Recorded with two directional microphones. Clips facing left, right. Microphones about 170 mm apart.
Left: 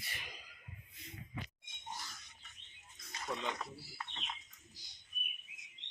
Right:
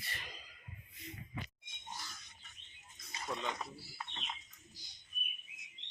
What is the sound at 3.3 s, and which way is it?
Speech, 20° left (ahead or behind).